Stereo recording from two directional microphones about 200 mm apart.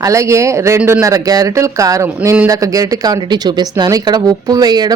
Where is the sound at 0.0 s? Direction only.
15° right (ahead or behind).